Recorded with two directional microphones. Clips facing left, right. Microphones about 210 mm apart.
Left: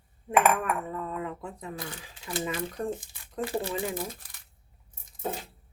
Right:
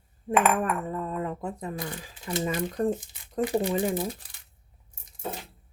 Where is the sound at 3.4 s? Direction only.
15° right (ahead or behind).